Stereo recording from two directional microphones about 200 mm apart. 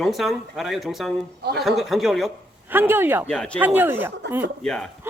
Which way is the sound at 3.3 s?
5° left (ahead or behind).